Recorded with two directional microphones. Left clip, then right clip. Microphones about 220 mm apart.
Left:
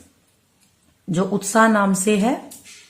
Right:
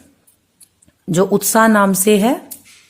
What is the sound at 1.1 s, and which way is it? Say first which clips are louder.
A woman's voice: right 6 dB; 45° right (ahead or behind).